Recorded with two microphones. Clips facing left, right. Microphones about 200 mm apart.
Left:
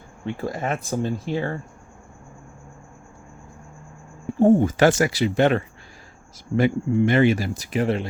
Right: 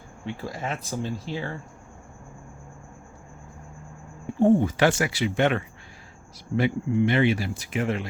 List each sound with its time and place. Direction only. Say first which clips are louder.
0.4 s speech: left 6 dB; 50° left (ahead or behind)
4.4 s speech: left 3 dB; 45° left (ahead or behind)